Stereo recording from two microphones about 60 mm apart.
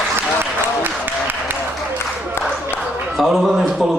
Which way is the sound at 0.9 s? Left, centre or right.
Right.